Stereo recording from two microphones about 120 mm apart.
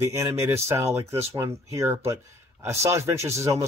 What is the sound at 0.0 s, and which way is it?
Speech, 25° right (ahead or behind).